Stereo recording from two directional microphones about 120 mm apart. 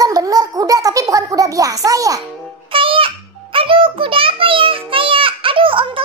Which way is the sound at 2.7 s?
45° right (ahead or behind).